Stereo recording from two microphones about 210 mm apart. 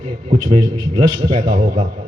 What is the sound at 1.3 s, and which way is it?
Speech, 40° right (ahead or behind).